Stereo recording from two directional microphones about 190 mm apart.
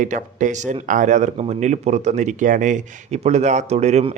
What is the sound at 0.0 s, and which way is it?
Speech, 40° right (ahead or behind).